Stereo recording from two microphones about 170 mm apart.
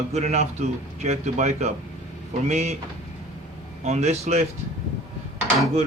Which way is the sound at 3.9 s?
40° right (ahead or behind).